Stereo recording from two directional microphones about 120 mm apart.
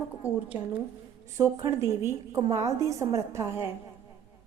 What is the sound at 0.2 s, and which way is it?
Speech, 15° right (ahead or behind).